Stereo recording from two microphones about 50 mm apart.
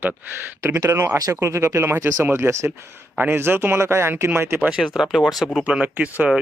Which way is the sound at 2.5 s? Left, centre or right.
Right.